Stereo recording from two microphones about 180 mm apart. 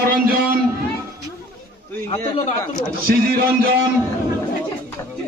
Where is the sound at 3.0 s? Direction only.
55° right (ahead or behind).